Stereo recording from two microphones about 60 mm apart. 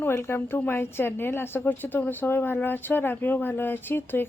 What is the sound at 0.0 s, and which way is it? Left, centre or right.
A woman's voice, left.